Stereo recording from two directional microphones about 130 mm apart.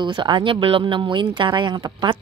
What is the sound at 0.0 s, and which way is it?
Speech, 35° right (ahead or behind).